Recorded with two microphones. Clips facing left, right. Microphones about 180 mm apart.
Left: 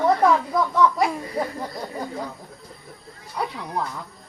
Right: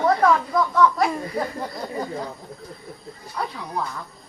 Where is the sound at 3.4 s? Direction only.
15° left (ahead or behind).